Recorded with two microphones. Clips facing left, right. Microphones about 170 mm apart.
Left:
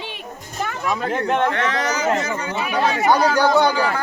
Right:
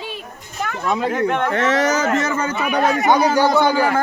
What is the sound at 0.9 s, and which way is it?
Speech, 25° right (ahead or behind).